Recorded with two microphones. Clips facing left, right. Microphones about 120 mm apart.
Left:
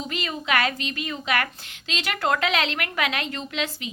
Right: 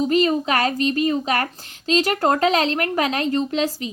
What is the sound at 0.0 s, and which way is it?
A woman's voice, 40° right (ahead or behind).